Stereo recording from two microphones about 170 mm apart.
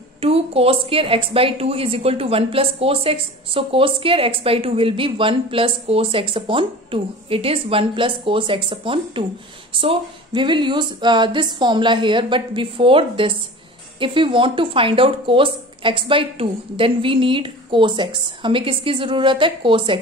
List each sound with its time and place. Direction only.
0.2 s a woman's voice: 35° right (ahead or behind)